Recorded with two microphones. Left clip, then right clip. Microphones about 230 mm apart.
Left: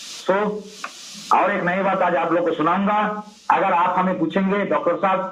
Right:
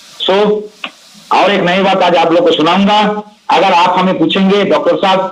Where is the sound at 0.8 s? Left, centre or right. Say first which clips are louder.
Right 5 dB; right.